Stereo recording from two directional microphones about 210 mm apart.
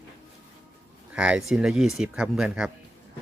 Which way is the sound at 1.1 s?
5° right (ahead or behind).